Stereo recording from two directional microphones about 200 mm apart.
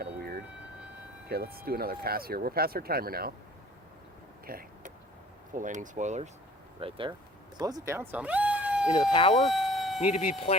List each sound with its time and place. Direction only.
0.0 s siren: 50° right (ahead or behind)
1.3 s speech: 50° right (ahead or behind)
4.4 s vehicle: 45° right (ahead or behind)
5.5 s speech: 40° right (ahead or behind)
7.6 s speech: 15° right (ahead or behind)
9.4 s a sound: centre (ahead or behind)
10.0 s speech: 30° left (ahead or behind)